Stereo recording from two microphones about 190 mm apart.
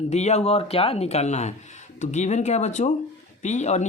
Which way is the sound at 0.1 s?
35° left (ahead or behind).